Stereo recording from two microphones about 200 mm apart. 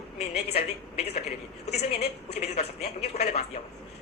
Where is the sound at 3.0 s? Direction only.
30° left (ahead or behind).